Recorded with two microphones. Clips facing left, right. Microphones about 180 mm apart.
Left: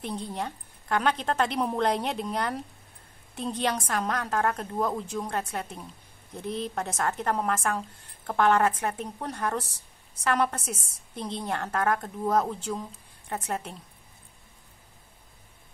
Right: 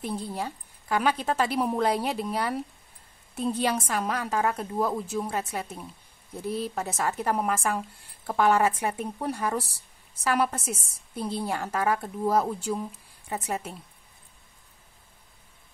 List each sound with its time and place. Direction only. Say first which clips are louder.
0.0 s a woman's voice: right 1 dB; 5° right (ahead or behind)